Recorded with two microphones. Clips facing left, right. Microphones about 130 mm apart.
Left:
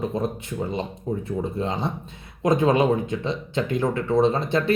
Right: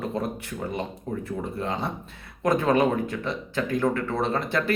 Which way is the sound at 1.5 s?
20° left (ahead or behind).